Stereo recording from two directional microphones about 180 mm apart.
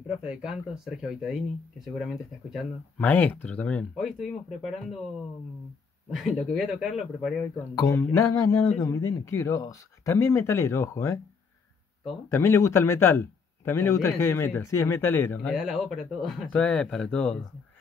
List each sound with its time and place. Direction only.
0.2 s speech: 5° right (ahead or behind)
3.0 s speech: 10° left (ahead or behind)
6.1 s speech: centre (ahead or behind)
7.5 s speech: 15° left (ahead or behind)
12.3 s speech: 15° left (ahead or behind)